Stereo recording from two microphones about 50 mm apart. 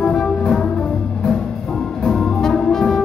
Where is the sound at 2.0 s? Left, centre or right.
Centre.